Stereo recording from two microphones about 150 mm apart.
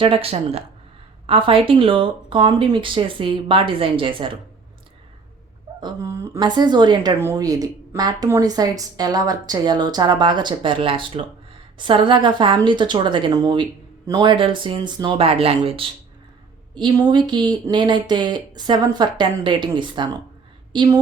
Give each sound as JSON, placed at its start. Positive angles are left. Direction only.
{"t": 0.0, "sound": "speech", "side_deg": -35}
{"t": 5.8, "sound": "a woman's voice", "side_deg": -20}
{"t": 6.4, "sound": "a woman's voice", "side_deg": -30}